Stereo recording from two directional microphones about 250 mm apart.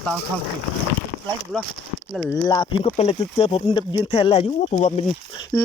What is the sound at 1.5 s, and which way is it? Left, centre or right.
Speech, centre.